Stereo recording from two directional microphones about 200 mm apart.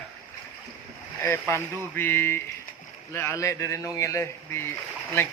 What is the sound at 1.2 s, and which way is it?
Speech, 10° left (ahead or behind).